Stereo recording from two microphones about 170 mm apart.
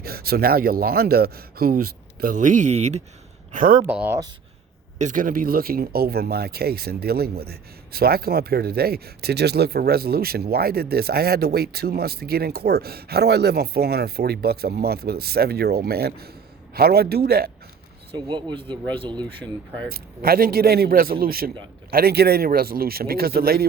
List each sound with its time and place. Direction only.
0.0 s a man's voice: 65° right (ahead or behind); by 3.0 s 40° right (ahead or behind)
3.5 s speech: 50° right (ahead or behind)
3.8 s speech: 10° right (ahead or behind)
4.9 s a man's voice: 50° right (ahead or behind)
18.1 s speech: 25° right (ahead or behind)
19.9 s a man's voice: 60° right (ahead or behind)